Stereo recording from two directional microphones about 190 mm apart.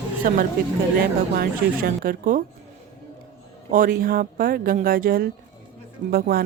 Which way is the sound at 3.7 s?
50° right (ahead or behind).